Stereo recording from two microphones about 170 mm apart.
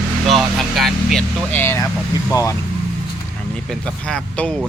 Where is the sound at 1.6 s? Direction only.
15° left (ahead or behind).